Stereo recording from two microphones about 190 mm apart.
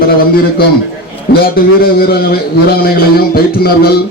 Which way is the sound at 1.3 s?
55° left (ahead or behind).